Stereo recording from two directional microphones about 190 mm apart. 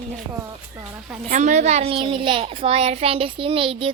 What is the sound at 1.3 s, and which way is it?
A child's voice, 40° right (ahead or behind).